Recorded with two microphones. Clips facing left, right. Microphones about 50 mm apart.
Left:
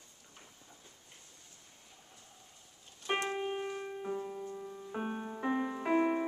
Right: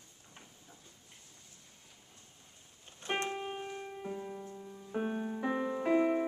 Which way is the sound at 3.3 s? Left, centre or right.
Centre.